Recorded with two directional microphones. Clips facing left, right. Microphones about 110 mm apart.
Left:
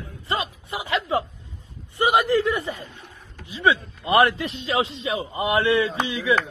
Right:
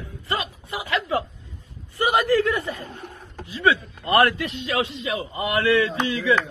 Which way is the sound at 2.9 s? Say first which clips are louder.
Right 6 dB; 45° right (ahead or behind).